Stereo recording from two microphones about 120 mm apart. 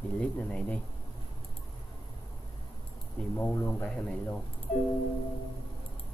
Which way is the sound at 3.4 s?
15° left (ahead or behind).